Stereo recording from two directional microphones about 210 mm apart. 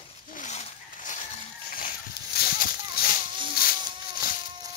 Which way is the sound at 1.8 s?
45° left (ahead or behind).